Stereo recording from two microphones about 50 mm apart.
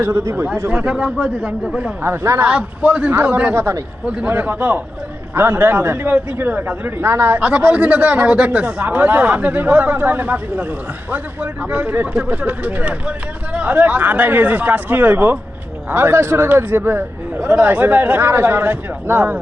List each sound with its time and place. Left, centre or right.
0.0 s a man's voice: right
0.7 s speech: right
2.0 s a man's voice: right
2.8 s speech: right
3.5 s a man's voice: right
4.0 s speech: right
4.3 s a man's voice: right
6.5 s speech: right
7.1 s a man's voice: right
7.4 s speech: right
9.0 s a man's voice: right
9.2 s a man's voice: right
17.4 s speech: right